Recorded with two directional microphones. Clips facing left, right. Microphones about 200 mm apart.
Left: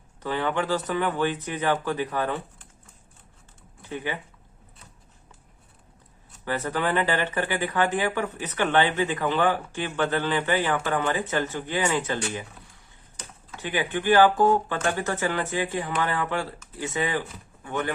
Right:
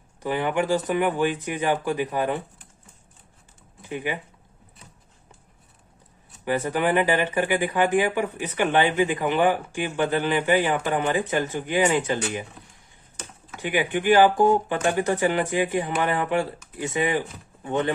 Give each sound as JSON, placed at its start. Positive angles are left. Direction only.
{"t": 0.2, "sound": "speech", "side_deg": -15}
{"t": 3.8, "sound": "speech", "side_deg": -15}
{"t": 6.4, "sound": "speech", "side_deg": -15}
{"t": 13.6, "sound": "speech", "side_deg": -15}